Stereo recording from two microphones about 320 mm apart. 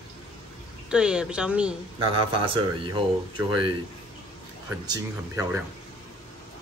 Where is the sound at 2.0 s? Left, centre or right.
Centre.